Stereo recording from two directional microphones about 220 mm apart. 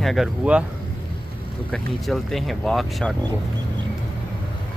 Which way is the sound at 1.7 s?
Centre (ahead or behind).